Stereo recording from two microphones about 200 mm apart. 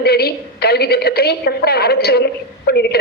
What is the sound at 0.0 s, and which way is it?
A woman's voice, 50° left (ahead or behind).